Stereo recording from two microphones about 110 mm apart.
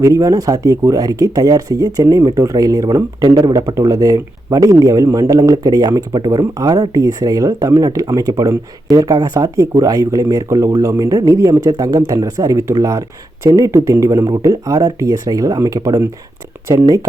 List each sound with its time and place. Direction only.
0.0 s speech: 30° right (ahead or behind)